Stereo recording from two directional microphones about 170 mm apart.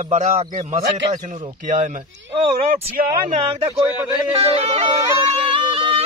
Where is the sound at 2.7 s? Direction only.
55° right (ahead or behind).